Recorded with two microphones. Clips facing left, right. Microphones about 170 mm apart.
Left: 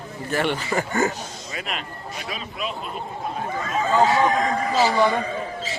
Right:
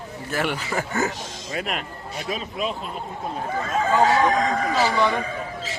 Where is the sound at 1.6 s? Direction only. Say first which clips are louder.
Right 3 dB; 45° right (ahead or behind).